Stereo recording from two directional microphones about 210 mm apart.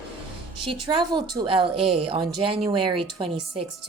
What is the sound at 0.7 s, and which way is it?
Speech, 20° right (ahead or behind).